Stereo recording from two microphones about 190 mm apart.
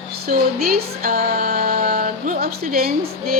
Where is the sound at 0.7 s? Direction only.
50° right (ahead or behind).